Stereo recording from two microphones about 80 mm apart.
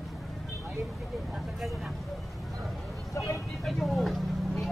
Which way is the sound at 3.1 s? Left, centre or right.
Left.